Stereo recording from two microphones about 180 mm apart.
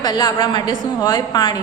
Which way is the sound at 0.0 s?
20° left (ahead or behind).